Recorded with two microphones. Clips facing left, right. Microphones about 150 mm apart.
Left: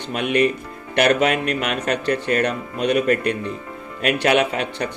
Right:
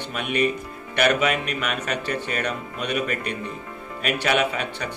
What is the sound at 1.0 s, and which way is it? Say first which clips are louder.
Speech: left 3 dB; 45° left (ahead or behind).